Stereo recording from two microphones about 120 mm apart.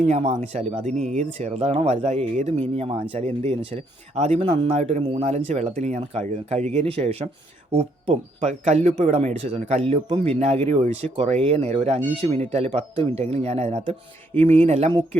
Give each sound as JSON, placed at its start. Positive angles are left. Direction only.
{"t": 0.0, "sound": "speech", "side_deg": -60}
{"t": 6.7, "sound": "speech", "side_deg": -55}